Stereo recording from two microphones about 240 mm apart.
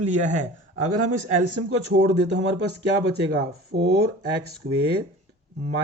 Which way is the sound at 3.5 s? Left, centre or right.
Right.